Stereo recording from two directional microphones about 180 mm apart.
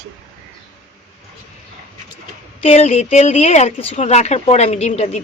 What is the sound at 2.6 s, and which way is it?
Speech, 35° left (ahead or behind).